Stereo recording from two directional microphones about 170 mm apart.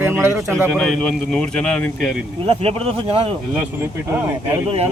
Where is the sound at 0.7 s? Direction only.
5° left (ahead or behind).